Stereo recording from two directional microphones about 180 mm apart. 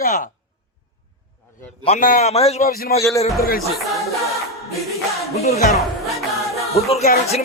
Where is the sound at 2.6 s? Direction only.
55° left (ahead or behind).